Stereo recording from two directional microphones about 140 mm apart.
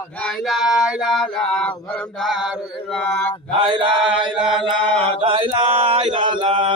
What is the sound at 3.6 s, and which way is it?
Mantra, 35° right (ahead or behind).